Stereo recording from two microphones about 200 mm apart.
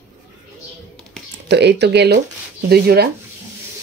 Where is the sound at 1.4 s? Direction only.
60° right (ahead or behind).